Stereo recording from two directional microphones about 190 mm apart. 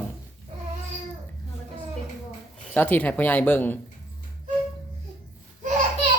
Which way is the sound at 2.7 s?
10° left (ahead or behind).